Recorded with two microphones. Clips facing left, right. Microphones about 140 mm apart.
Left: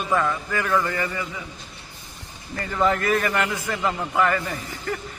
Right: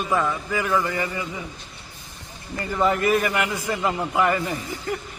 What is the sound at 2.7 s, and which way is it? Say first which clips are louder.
A man's voice: right 1 dB; 10° right (ahead or behind).